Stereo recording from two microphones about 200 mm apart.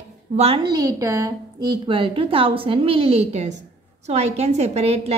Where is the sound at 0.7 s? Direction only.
20° right (ahead or behind).